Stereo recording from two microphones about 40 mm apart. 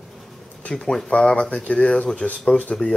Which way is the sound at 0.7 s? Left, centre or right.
Centre.